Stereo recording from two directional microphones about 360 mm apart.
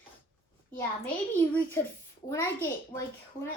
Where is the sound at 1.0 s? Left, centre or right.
Centre.